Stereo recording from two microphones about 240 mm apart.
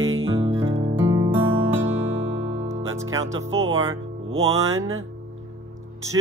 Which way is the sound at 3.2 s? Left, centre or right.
Right.